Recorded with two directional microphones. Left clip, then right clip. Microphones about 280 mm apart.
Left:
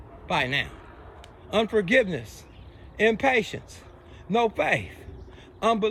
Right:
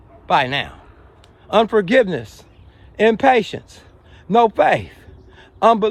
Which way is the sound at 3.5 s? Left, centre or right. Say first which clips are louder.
Right 7 dB; right.